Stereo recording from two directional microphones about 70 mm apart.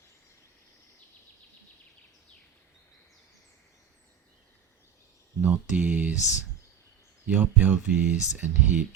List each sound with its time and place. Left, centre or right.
5.4 s speech: right
7.3 s speech: right